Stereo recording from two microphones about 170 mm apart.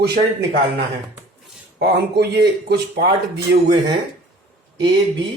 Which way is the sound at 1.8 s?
70° right (ahead or behind).